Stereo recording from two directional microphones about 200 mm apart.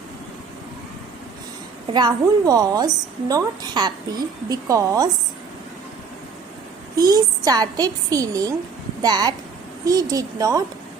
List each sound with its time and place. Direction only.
1.9 s a woman's voice: 20° right (ahead or behind)
6.9 s a woman's voice: 20° right (ahead or behind)